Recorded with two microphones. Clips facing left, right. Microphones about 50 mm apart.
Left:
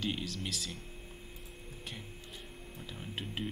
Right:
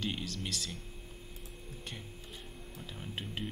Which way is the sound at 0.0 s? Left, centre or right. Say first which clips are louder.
Left 1 dB; centre.